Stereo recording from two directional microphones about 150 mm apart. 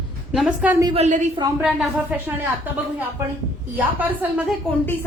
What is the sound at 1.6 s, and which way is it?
Speech, 10° right (ahead or behind).